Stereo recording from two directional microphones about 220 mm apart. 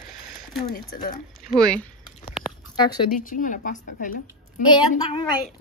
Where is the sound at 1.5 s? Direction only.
5° left (ahead or behind).